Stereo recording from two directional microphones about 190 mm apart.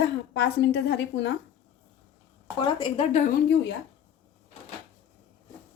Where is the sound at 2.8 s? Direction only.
35° left (ahead or behind).